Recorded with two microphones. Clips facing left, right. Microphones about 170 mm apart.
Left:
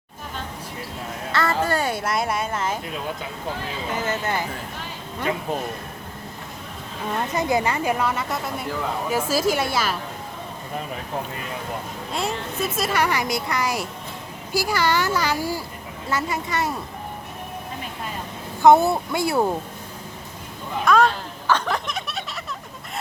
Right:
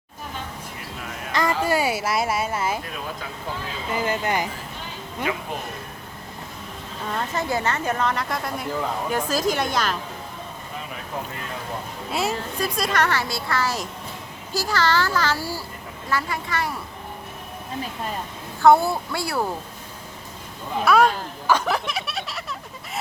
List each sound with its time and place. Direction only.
1.3 s speech: 15° right (ahead or behind)
3.9 s speech: 10° right (ahead or behind)
7.2 s speech: 15° left (ahead or behind)
12.5 s speech: 5° left (ahead or behind); by 16.8 s 20° left (ahead or behind)
18.6 s speech: 20° left (ahead or behind)
20.8 s speech: 10° right (ahead or behind)